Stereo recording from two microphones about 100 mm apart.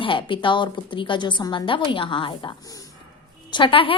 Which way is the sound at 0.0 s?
55° left (ahead or behind).